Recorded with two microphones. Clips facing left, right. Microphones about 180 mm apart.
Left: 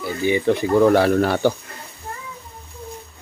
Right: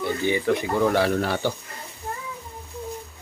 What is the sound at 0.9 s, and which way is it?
Speech, 55° left (ahead or behind).